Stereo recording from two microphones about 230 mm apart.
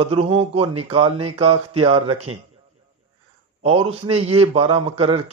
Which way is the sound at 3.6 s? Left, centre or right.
Right.